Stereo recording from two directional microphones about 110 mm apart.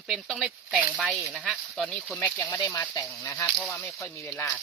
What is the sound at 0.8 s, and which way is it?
Speech, 15° right (ahead or behind).